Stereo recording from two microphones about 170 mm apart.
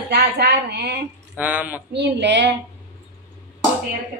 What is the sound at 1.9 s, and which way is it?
Speech, 85° right.